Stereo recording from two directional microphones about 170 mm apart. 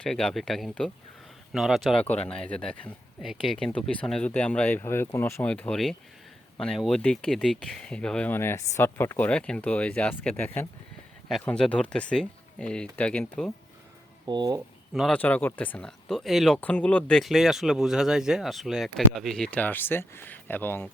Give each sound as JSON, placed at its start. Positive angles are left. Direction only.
{"t": 0.0, "sound": "speech", "side_deg": 5}
{"t": 14.3, "sound": "speech", "side_deg": -25}
{"t": 14.9, "sound": "speech", "side_deg": 5}